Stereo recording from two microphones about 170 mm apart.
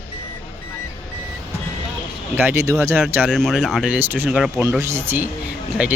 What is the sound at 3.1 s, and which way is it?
Speech, 5° right (ahead or behind).